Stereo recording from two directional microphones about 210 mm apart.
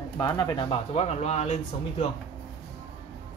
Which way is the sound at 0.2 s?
20° left (ahead or behind).